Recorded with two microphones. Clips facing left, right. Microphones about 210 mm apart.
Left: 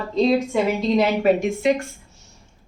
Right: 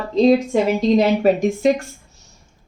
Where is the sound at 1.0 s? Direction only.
40° right (ahead or behind).